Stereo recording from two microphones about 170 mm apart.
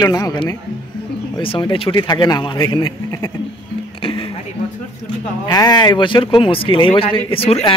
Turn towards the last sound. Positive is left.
turn(degrees=35)  # may be behind; listen again after turning